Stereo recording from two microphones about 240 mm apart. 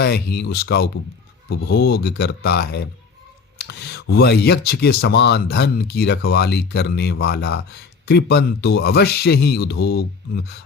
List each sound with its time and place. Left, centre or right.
0.0 s speech: left